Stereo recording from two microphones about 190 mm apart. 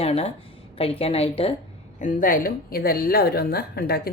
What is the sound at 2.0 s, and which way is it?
Speech, 45° left (ahead or behind).